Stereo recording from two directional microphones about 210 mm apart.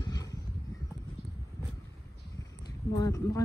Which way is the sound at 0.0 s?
20° left (ahead or behind).